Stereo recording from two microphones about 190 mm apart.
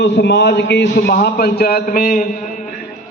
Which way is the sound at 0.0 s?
65° left (ahead or behind).